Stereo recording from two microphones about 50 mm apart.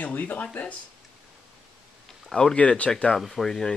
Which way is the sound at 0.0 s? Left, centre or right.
Left.